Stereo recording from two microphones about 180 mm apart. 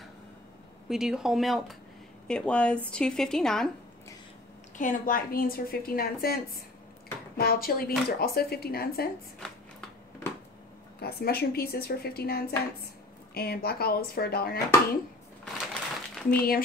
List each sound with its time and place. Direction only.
0.8 s speech: 5° right (ahead or behind)
4.7 s a woman's voice: 50° left (ahead or behind)
9.4 s a sound: 5° left (ahead or behind)
11.0 s a woman's voice: 60° left (ahead or behind)
15.7 s crumpling: 5° left (ahead or behind)